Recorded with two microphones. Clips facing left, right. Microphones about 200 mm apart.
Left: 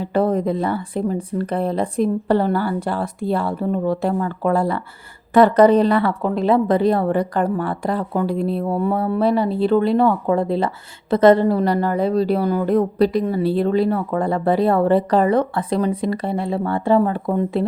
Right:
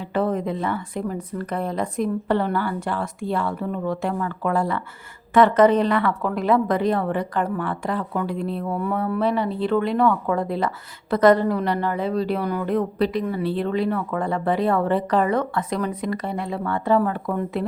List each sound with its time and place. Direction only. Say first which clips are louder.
0.0 s a woman's voice: left 5 dB; 35° left (ahead or behind)